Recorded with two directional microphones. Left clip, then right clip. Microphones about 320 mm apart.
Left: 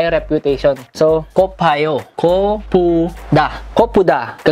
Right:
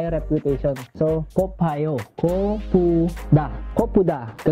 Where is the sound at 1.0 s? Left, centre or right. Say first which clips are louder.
Left 9 dB; left.